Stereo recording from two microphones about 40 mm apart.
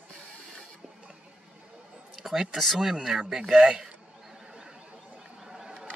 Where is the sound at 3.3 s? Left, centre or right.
Centre.